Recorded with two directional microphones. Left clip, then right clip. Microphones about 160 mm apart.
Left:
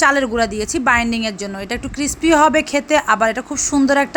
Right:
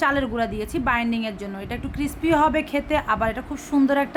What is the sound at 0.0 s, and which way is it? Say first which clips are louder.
A woman's voice: left 7 dB; 20° left (ahead or behind).